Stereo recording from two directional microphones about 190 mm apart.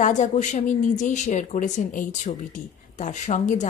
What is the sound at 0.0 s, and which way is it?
A woman's voice, 40° left (ahead or behind).